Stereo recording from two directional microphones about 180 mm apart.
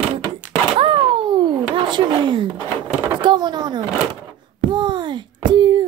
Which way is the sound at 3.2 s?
25° right (ahead or behind).